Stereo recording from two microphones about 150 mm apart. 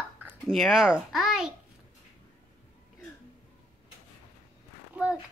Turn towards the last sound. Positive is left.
turn(degrees=-10)  # may be behind; listen again after turning